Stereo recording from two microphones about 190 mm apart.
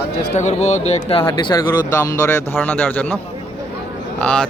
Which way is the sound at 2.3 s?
10° left (ahead or behind).